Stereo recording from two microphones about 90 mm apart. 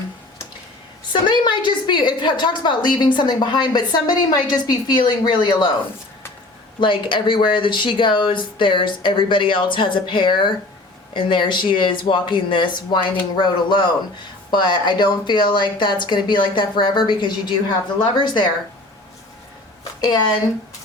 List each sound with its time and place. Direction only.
1.1 s a woman's voice: 60° left (ahead or behind)
6.7 s a woman's voice: 65° left (ahead or behind)